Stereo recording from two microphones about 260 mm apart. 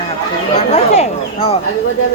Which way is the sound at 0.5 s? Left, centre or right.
Left.